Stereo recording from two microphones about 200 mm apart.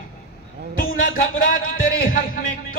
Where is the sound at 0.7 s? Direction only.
45° left (ahead or behind).